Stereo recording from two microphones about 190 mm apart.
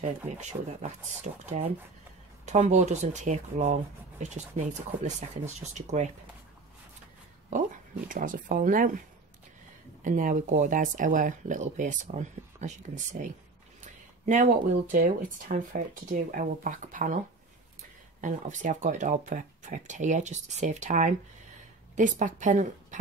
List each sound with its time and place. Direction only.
0.0 s speech: 40° right (ahead or behind)
8.1 s speech: 45° right (ahead or behind)
10.0 s speech: 40° right (ahead or behind)
18.2 s a woman's voice: 40° right (ahead or behind)